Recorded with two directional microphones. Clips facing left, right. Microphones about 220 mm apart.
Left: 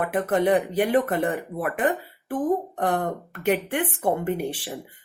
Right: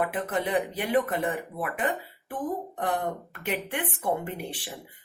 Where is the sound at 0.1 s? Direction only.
50° left (ahead or behind).